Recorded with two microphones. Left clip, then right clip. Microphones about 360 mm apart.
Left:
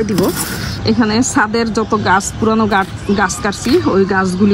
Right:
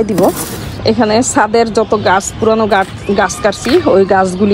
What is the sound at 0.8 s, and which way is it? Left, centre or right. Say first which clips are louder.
A woman's voice: right 5 dB; centre.